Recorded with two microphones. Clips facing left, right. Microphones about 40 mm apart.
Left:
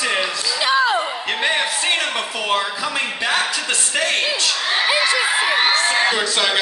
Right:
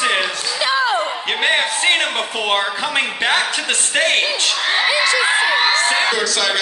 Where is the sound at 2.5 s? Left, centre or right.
Right.